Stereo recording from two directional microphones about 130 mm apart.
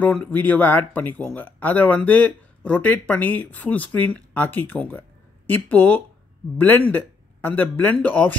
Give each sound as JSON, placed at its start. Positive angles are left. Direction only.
{"t": 0.0, "sound": "speech", "side_deg": 10}